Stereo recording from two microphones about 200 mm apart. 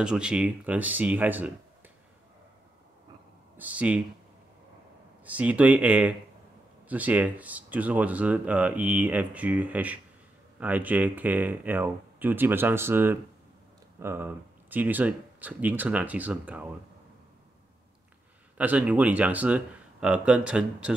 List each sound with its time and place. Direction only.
0.0 s speech: 5° right (ahead or behind)
3.5 s speech: 5° right (ahead or behind)
5.2 s speech: 5° right (ahead or behind)
18.6 s speech: 5° right (ahead or behind)